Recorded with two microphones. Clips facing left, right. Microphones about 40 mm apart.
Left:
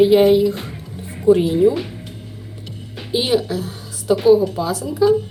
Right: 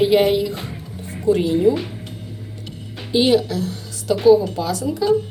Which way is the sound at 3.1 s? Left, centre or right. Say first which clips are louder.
Right 2 dB; centre.